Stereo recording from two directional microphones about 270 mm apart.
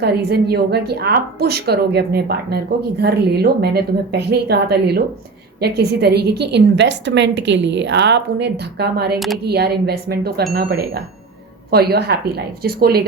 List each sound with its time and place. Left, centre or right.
0.0 s a woman's voice: right
9.1 s speech: centre
9.5 s a woman's voice: right